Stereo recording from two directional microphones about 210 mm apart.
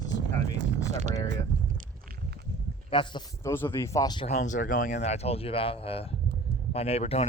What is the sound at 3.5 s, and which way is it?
Speech, 10° left (ahead or behind).